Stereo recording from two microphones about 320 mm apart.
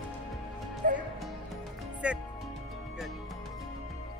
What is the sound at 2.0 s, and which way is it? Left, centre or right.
Speech, centre.